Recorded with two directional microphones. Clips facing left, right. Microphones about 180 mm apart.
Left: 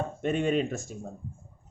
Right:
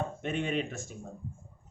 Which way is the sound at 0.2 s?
45° left (ahead or behind).